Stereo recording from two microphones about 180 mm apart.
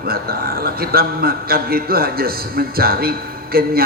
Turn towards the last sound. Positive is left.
turn(degrees=-55)  # may be behind; listen again after turning